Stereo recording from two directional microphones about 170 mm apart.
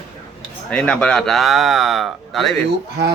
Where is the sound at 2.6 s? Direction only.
80° right.